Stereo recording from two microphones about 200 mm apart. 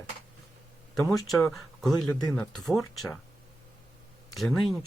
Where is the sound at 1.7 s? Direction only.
Centre (ahead or behind).